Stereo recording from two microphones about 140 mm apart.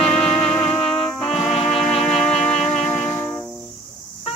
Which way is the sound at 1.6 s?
Centre (ahead or behind).